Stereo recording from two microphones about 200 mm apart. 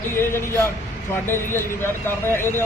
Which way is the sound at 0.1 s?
10° left (ahead or behind).